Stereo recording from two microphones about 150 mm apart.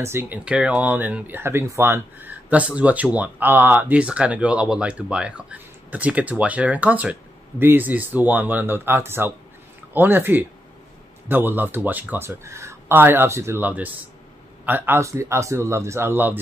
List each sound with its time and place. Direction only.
0.0 s speech: 15° right (ahead or behind)